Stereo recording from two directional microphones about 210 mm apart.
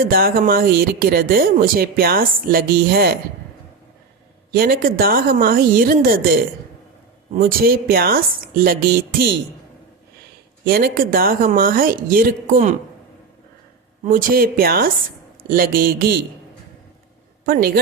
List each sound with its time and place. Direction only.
0.0 s speech: 45° right (ahead or behind)
4.5 s speech: 45° right (ahead or behind)
10.7 s speech: 45° right (ahead or behind)
14.0 s speech: 40° right (ahead or behind)
17.4 s a woman's voice: 45° right (ahead or behind)